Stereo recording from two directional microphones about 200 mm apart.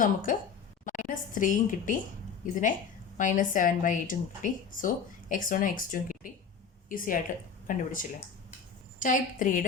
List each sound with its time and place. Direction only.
0.0 s a woman's voice: 40° left (ahead or behind)
9.0 s speech: 40° left (ahead or behind)